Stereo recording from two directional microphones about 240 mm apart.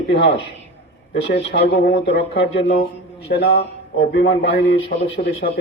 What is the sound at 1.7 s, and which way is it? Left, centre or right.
A man's voice, left.